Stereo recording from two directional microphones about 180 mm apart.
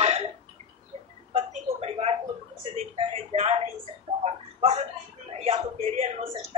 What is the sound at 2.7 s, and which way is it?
Speech, 35° right (ahead or behind).